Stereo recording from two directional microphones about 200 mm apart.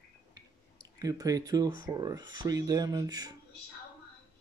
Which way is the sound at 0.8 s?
20° right (ahead or behind).